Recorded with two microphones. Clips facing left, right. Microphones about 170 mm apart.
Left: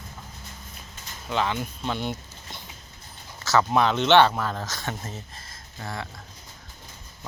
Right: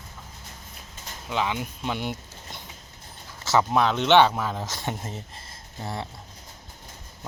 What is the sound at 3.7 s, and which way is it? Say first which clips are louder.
Speech: even; centre (ahead or behind).